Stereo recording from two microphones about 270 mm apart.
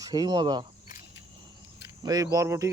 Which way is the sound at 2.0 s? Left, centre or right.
Centre.